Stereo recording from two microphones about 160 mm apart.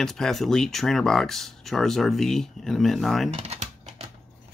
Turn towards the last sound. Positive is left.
turn(degrees=-40)  # may be behind; listen again after turning